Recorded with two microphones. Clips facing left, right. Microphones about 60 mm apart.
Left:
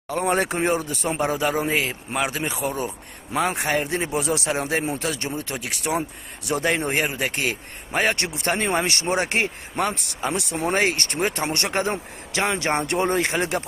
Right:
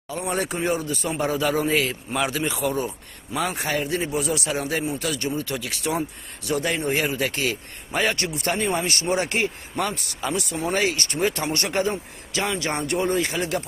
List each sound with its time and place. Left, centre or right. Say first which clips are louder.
0.1 s speech: left 4 dB; left